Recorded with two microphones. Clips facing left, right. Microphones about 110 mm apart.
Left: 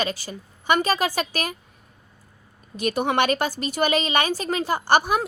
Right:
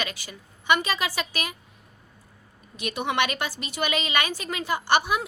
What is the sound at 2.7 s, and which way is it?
Speech, 40° left (ahead or behind).